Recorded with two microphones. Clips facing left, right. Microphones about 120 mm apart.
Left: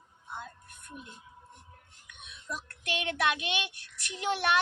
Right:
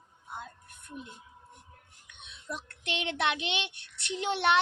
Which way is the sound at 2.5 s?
25° right (ahead or behind).